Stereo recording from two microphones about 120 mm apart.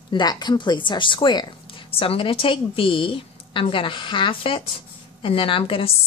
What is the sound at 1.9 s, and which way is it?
A woman's voice, 50° left (ahead or behind).